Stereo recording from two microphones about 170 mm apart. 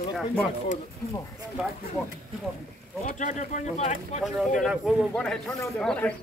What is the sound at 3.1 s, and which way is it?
Speech, 45° left (ahead or behind).